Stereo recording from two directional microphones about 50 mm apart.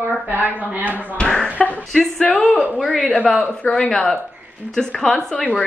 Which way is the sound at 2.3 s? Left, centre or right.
Left.